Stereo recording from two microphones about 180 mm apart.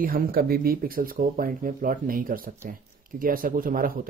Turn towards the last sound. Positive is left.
turn(degrees=-50)  # may be behind; listen again after turning